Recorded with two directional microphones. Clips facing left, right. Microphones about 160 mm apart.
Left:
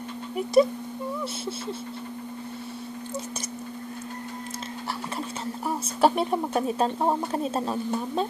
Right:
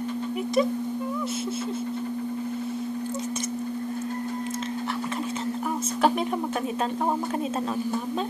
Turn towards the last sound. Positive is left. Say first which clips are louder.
# left 2 dB
turn(degrees=35)  # may be behind; listen again after turning